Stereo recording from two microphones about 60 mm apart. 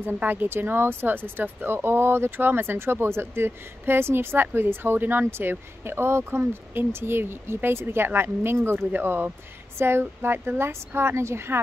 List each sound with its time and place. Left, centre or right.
0.2 s speech: right